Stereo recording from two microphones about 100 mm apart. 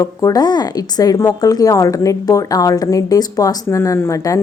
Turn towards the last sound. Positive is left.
turn(degrees=30)  # may be behind; listen again after turning